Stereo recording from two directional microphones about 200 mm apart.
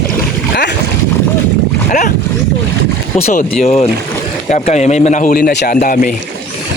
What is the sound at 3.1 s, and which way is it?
A man's voice, 35° left (ahead or behind).